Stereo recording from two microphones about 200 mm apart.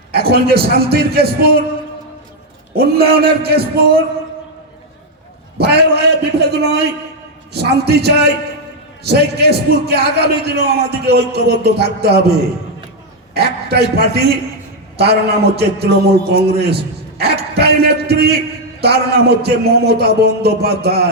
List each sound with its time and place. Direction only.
0.1 s a man's voice: 50° right (ahead or behind)
2.7 s a man's voice: 50° right (ahead or behind)
5.5 s a man's voice: 55° right (ahead or behind)
13.3 s a man's voice: 55° right (ahead or behind)
16.6 s a sound: 55° right (ahead or behind)
18.8 s a man's voice: 55° right (ahead or behind)